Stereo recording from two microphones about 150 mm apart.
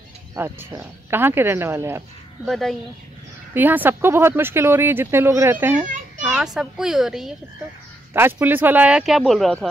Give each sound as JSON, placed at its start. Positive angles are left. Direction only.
{"t": 0.4, "sound": "speech", "side_deg": -15}
{"t": 2.4, "sound": "a child's voice", "side_deg": 0}
{"t": 3.5, "sound": "speech", "side_deg": -10}
{"t": 6.2, "sound": "a child's voice", "side_deg": -5}
{"t": 8.1, "sound": "speech", "side_deg": -15}